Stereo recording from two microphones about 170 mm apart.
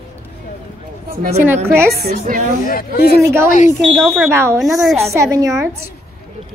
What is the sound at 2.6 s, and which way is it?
Speech, 55° left (ahead or behind).